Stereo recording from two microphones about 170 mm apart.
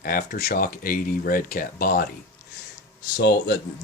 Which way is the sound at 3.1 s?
75° left (ahead or behind).